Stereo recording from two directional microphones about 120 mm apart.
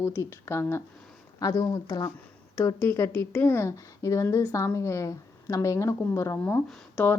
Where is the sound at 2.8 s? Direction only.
25° left (ahead or behind).